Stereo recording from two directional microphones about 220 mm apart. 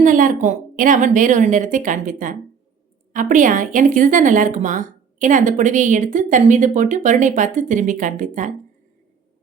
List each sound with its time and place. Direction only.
0.0 s speech: 35° right (ahead or behind)